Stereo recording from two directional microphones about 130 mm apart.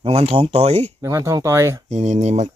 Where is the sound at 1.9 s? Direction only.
60° right (ahead or behind).